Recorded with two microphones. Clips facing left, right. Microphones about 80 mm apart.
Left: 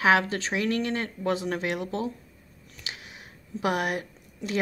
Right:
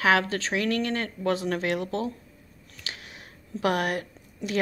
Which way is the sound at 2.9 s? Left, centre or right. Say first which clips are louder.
Right 1 dB; centre.